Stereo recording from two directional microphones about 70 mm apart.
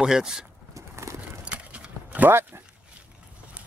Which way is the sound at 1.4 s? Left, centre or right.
Centre.